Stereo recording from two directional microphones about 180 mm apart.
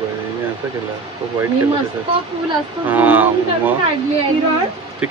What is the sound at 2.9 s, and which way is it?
Speech, 10° right (ahead or behind).